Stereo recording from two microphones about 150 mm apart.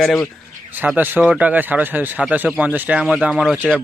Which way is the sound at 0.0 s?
5° left (ahead or behind).